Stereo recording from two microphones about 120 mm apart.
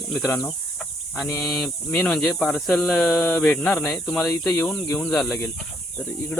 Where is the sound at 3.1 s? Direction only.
15° left (ahead or behind).